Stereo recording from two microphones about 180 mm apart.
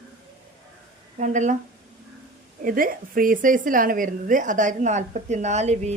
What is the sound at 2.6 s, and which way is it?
A woman's voice, 50° right (ahead or behind).